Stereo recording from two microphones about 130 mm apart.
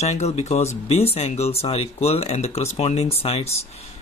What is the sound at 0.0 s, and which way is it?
Speech, 60° left (ahead or behind).